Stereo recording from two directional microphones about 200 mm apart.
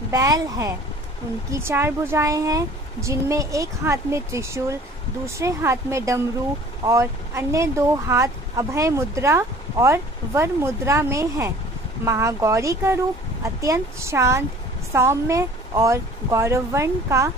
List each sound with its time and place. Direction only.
0.1 s speech: 15° right (ahead or behind)